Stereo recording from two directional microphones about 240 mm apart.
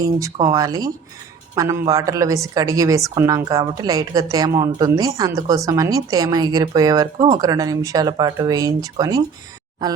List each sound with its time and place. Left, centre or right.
0.0 s a woman's voice: centre